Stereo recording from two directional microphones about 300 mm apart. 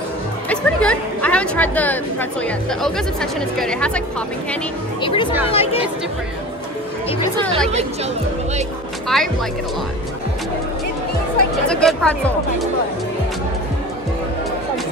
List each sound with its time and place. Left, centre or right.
0.5 s a woman's voice: centre
5.0 s speech: centre
9.1 s a woman's voice: centre
11.7 s a woman's voice: centre